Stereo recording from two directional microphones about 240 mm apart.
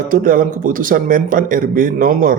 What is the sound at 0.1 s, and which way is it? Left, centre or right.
A man's voice, right.